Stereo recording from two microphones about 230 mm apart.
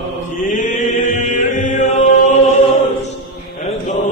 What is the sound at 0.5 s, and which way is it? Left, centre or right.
Chant, left.